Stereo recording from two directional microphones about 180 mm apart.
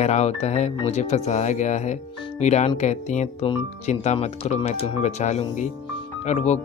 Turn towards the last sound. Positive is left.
turn(degrees=40)  # may be behind; listen again after turning